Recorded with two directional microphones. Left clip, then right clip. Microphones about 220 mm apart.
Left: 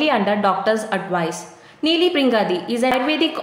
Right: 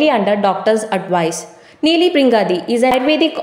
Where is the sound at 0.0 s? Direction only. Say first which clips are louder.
Right 4 dB; 15° right (ahead or behind).